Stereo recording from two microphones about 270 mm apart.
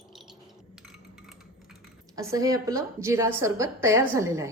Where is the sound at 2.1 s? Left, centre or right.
Centre.